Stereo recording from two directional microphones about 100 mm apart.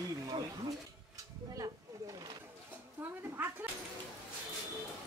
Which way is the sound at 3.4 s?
15° right (ahead or behind).